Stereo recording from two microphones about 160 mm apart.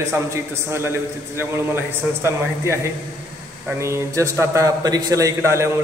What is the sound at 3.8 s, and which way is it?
A man's voice, 15° right (ahead or behind).